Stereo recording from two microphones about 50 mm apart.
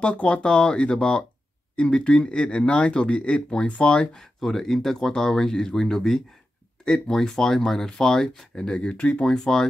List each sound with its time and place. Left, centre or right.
0.0 s speech: left